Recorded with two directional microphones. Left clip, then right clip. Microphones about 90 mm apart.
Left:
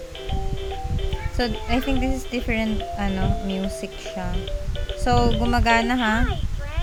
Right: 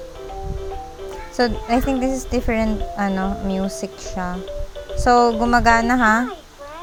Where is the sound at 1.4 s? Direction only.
35° right (ahead or behind).